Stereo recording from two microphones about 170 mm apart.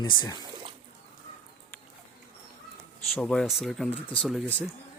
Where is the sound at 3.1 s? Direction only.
5° left (ahead or behind).